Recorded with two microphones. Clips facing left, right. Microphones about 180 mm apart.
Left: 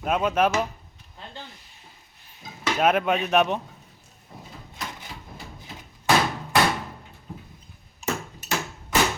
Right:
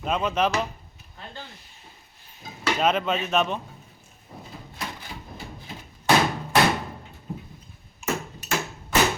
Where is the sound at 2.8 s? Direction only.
10° left (ahead or behind).